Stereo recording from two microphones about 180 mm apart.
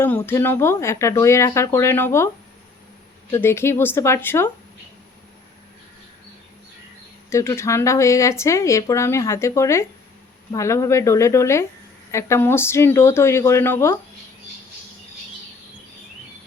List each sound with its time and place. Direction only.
0.0 s speech: 10° left (ahead or behind)
3.3 s speech: 15° left (ahead or behind)
7.3 s speech: 15° left (ahead or behind)